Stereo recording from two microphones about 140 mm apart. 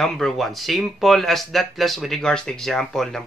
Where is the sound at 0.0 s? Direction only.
Centre (ahead or behind).